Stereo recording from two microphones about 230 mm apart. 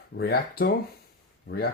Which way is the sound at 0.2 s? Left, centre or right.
Left.